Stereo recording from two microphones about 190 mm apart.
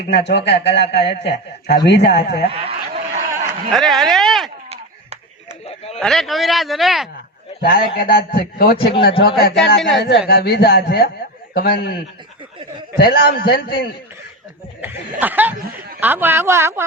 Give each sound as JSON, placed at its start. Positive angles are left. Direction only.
{"t": 0.1, "sound": "a man's voice", "side_deg": 65}
{"t": 2.5, "sound": "snicker", "side_deg": -30}
{"t": 3.7, "sound": "speech", "side_deg": 0}
{"t": 5.6, "sound": "a sound", "side_deg": 30}
{"t": 6.0, "sound": "speech", "side_deg": 0}
{"t": 7.6, "sound": "a man's voice", "side_deg": 55}
{"t": 14.8, "sound": "speech", "side_deg": -10}